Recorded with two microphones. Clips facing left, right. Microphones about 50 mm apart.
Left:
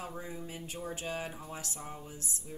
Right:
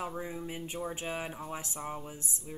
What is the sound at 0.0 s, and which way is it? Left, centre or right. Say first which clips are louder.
Speech: right 4 dB; centre.